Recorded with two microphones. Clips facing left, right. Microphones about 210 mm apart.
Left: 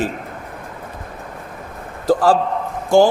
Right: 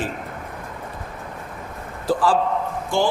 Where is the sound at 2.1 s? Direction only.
45° left (ahead or behind).